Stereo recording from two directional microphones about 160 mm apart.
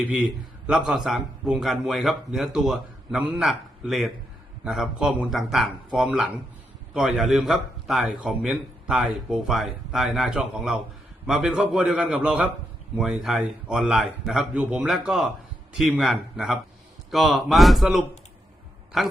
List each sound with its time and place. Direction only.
0.1 s a man's voice: 5° right (ahead or behind)